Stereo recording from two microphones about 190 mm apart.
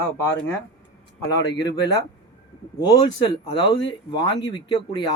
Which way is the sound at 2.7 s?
20° left (ahead or behind).